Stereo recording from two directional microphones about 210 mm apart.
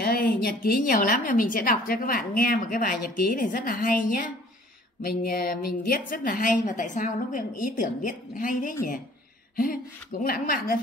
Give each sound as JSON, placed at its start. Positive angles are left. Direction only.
{"t": 0.0, "sound": "a woman's voice", "side_deg": 45}